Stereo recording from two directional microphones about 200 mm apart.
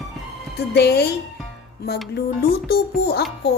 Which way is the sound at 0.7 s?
55° left (ahead or behind).